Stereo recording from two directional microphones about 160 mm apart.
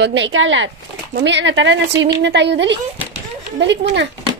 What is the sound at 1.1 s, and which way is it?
A woman's voice, 90° right.